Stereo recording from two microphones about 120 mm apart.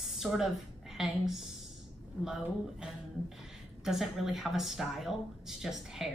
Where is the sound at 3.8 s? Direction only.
5° right (ahead or behind).